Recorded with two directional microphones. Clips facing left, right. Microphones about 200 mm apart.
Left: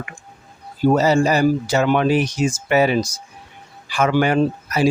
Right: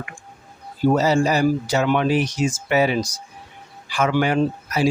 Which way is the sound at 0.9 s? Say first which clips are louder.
Left 3 dB; 50° left (ahead or behind).